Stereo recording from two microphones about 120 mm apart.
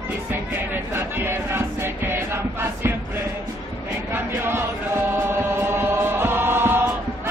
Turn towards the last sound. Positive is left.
turn(degrees=-20)  # may be behind; listen again after turning